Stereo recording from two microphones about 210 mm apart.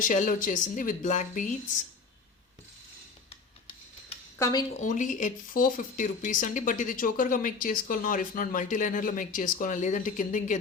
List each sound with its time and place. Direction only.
0.0 s speech: 40° left (ahead or behind)
4.8 s speech: 35° left (ahead or behind)